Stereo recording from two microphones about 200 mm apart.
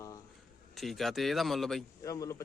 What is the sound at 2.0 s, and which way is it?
Speech, 15° left (ahead or behind).